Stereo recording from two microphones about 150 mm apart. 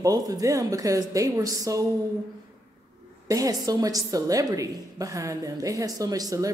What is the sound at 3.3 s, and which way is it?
A woman's voice, 25° right (ahead or behind).